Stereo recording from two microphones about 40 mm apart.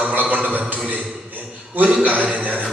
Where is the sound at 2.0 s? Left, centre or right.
Right.